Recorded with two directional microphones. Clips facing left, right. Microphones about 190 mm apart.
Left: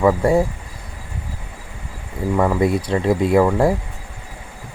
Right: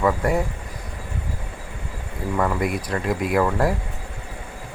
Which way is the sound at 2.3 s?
25° left (ahead or behind).